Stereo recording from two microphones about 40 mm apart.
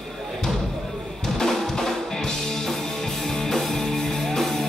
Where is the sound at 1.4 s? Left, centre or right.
Centre.